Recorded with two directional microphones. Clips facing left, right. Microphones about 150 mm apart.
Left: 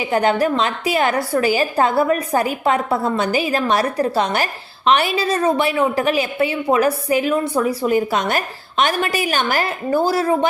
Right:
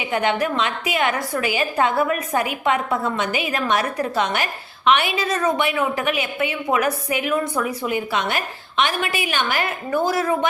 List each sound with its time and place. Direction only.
0.0 s a woman's voice: 40° left (ahead or behind)